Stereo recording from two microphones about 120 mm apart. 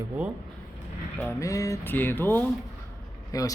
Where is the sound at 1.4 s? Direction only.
25° left (ahead or behind).